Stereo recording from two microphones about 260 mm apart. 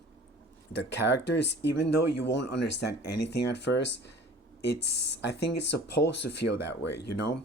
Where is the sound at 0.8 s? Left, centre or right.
Left.